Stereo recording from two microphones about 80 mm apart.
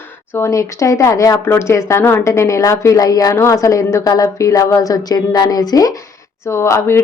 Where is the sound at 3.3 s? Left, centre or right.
Left.